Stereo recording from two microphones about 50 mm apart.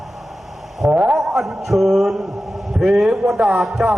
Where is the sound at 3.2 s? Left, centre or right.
Right.